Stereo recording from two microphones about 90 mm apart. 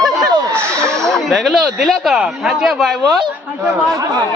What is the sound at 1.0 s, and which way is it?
Speech, 5° left (ahead or behind).